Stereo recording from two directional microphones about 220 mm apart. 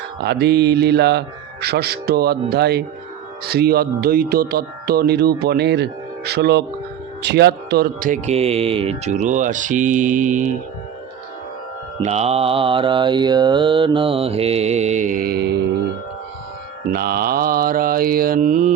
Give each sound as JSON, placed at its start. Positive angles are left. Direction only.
{"t": 0.2, "sound": "speech", "side_deg": -50}
{"t": 12.0, "sound": "mantra", "side_deg": -30}
{"t": 16.9, "sound": "speech", "side_deg": -45}